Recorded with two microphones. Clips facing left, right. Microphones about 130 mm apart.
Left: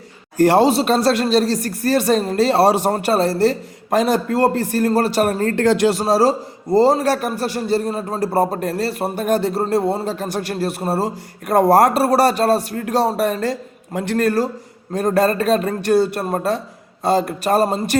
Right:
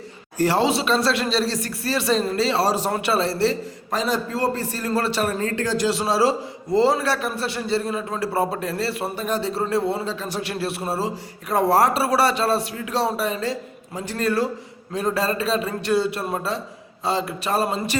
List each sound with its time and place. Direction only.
0.3 s a man's voice: 50° left (ahead or behind)
2.9 s a man's voice: 45° left (ahead or behind); by 6.0 s 65° left (ahead or behind)
6.0 s a man's voice: 40° left (ahead or behind)